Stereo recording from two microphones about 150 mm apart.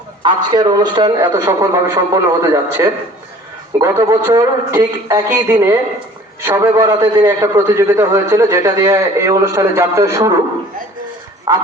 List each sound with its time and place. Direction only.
0.2 s a man's voice: 30° right (ahead or behind)
11.5 s a man's voice: 20° right (ahead or behind)